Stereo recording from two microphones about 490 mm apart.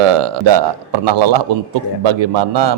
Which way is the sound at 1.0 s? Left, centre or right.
Right.